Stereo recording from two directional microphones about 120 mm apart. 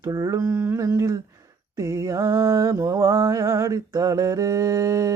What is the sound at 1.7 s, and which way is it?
Mantra, 25° right (ahead or behind).